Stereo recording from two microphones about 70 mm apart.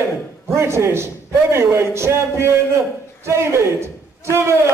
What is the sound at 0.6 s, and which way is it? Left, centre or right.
A man's voice, right.